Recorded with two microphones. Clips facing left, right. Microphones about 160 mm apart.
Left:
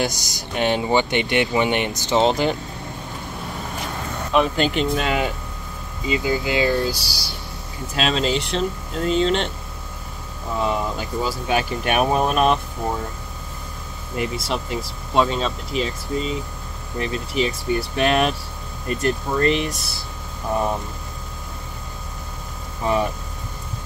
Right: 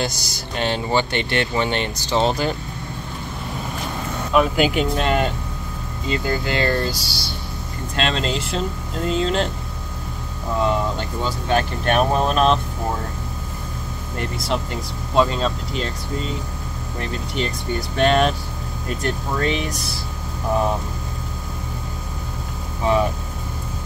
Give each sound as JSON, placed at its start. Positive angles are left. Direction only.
{"t": 0.0, "sound": "speech", "side_deg": 15}
{"t": 4.3, "sound": "speech", "side_deg": -5}
{"t": 7.9, "sound": "speech", "side_deg": 5}
{"t": 10.6, "sound": "speech", "side_deg": 5}
{"t": 14.1, "sound": "speech", "side_deg": 5}
{"t": 22.8, "sound": "speech", "side_deg": 0}